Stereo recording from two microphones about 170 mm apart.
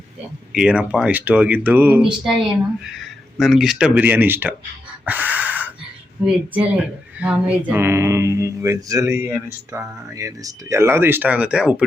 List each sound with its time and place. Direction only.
0.5 s speech: 5° right (ahead or behind)
5.0 s a sound: 10° right (ahead or behind)
6.2 s speech: 5° right (ahead or behind)